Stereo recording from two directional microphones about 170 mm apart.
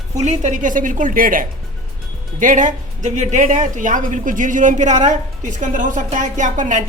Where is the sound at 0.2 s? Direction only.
45° right (ahead or behind).